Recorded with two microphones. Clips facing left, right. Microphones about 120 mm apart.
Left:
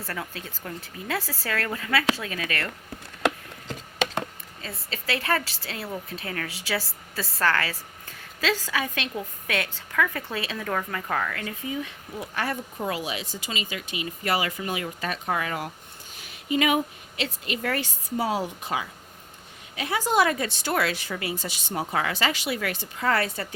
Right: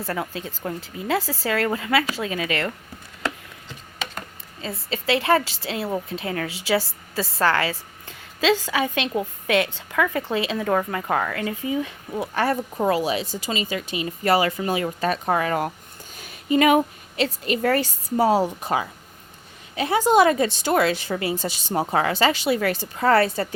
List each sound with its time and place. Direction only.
0.0 s a woman's voice: 25° right (ahead or behind)
3.7 s a sound: 90° left
4.6 s a woman's voice: 30° right (ahead or behind)